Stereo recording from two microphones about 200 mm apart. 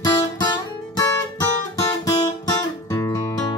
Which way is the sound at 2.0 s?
15° left (ahead or behind).